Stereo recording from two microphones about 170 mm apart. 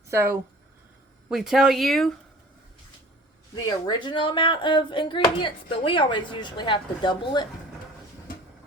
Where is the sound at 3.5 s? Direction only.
25° left (ahead or behind).